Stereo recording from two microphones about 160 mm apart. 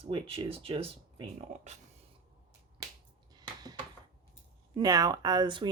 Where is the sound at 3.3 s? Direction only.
25° right (ahead or behind).